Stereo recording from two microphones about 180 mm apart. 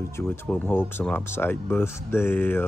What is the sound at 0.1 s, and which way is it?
Speech, 10° left (ahead or behind).